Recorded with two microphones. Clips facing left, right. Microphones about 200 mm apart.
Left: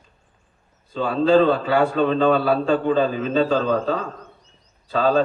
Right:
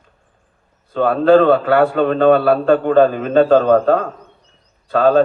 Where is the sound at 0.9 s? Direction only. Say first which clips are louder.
Right 5 dB; 60° right (ahead or behind).